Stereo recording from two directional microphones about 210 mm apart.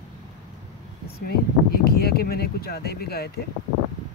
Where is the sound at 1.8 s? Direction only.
45° left (ahead or behind).